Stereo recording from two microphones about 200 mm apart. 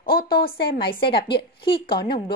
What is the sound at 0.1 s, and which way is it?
Speech, 50° left (ahead or behind).